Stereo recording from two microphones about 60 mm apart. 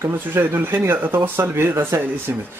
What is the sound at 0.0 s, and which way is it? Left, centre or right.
Speech, right.